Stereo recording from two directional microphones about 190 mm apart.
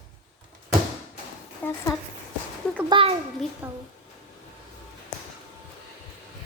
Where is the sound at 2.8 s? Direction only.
25° right (ahead or behind).